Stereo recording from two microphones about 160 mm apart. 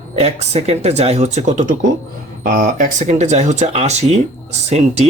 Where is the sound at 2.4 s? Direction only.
70° right (ahead or behind).